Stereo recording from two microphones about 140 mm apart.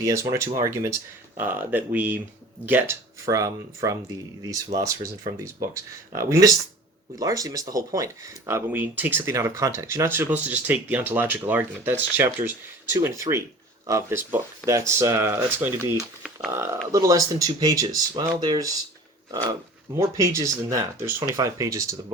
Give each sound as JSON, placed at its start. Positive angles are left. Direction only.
{"t": 0.0, "sound": "speech", "side_deg": -20}
{"t": 19.9, "sound": "speech", "side_deg": -20}